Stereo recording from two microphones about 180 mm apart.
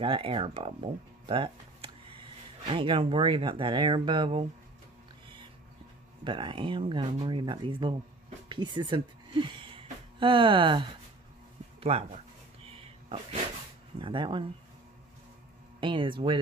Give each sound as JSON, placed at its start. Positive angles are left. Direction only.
{"t": 0.0, "sound": "speech", "side_deg": -30}
{"t": 6.2, "sound": "a woman's voice", "side_deg": -30}
{"t": 12.6, "sound": "a sound", "side_deg": -30}
{"t": 13.9, "sound": "speech", "side_deg": -30}
{"t": 15.8, "sound": "speech", "side_deg": -25}